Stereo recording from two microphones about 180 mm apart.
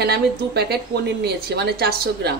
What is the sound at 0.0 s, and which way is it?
A woman's voice, 60° right (ahead or behind).